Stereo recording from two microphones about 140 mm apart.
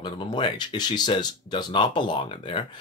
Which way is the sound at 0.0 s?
35° left (ahead or behind).